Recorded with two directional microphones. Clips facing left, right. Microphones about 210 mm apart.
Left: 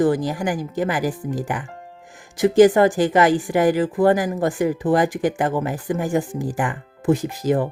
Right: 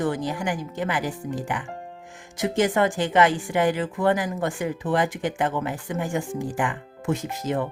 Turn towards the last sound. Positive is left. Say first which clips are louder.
# left 6 dB
turn(degrees=35)  # may be behind; listen again after turning